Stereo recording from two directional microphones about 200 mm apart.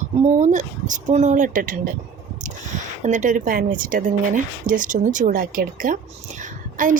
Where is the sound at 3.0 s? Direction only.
40° right (ahead or behind).